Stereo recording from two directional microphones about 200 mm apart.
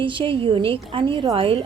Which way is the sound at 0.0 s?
25° right (ahead or behind).